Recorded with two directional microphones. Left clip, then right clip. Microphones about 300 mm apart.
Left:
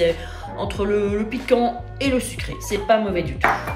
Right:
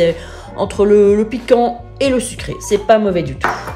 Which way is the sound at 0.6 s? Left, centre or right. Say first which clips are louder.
Right 11 dB; right.